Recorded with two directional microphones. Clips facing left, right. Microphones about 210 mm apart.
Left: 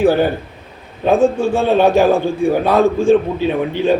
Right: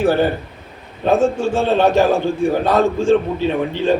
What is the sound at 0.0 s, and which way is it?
Speech, 15° left (ahead or behind).